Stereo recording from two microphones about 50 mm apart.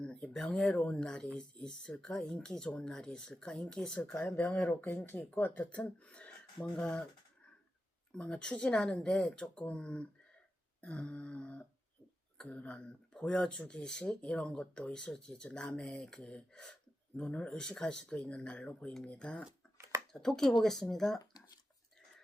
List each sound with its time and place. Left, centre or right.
0.0 s speech: centre
4.4 s speech: left
5.4 s speech: left
5.7 s speech: left
8.1 s speech: centre
20.1 s speech: centre